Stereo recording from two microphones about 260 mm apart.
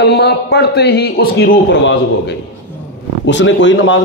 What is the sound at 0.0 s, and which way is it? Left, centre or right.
A man's voice, left.